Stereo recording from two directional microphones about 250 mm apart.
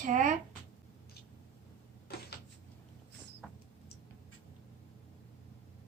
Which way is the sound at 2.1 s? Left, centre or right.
Left.